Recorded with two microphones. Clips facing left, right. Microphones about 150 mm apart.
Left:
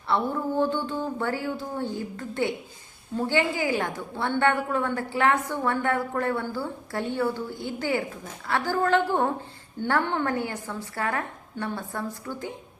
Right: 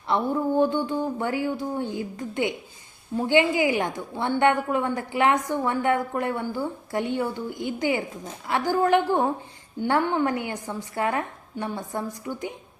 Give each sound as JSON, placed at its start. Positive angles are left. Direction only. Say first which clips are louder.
{"t": 0.1, "sound": "a woman's voice", "louder": "right 2 dB", "side_deg": -15}